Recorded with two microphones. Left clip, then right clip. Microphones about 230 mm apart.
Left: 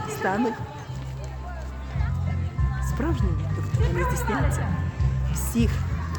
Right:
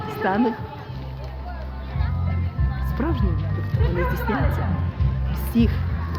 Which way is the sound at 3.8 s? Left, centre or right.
Left.